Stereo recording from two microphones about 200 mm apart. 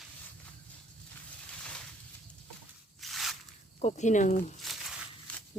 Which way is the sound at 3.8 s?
35° left (ahead or behind).